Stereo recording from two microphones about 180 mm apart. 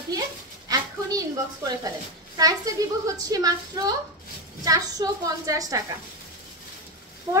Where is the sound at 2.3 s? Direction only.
20° right (ahead or behind).